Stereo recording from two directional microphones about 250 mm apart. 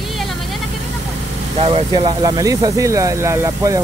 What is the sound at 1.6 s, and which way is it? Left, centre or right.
Speech, right.